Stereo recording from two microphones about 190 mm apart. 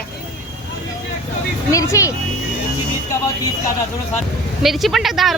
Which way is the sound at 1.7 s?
15° left (ahead or behind).